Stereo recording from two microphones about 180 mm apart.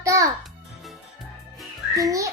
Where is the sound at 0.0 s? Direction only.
20° right (ahead or behind).